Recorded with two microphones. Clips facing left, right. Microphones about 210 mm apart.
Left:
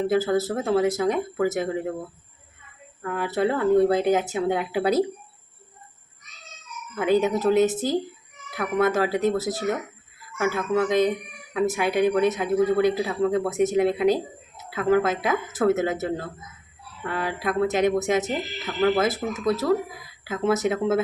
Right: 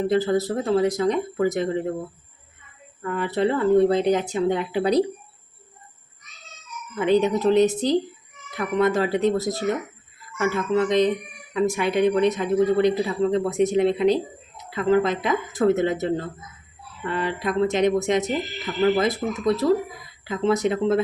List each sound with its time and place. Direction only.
0.1 s speech: 5° left (ahead or behind)
3.1 s speech: 5° left (ahead or behind)
6.9 s speech: 5° left (ahead or behind)